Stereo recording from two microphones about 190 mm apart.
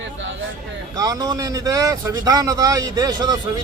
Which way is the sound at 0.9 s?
20° right (ahead or behind).